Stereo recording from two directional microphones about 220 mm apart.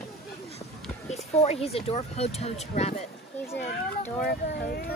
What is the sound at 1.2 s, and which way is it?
Speech, 30° left (ahead or behind).